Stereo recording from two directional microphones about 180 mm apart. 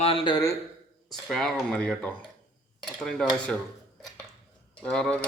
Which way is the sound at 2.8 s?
Centre (ahead or behind).